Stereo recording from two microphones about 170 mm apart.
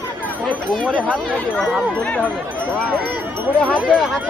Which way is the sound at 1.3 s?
5° left (ahead or behind).